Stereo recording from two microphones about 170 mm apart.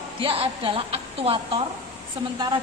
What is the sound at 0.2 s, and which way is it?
A woman's voice, 30° right (ahead or behind).